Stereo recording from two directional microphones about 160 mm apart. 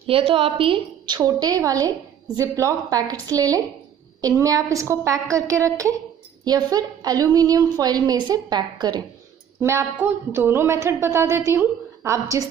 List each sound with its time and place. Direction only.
0.0 s a woman's voice: 35° right (ahead or behind); by 12.4 s 20° right (ahead or behind)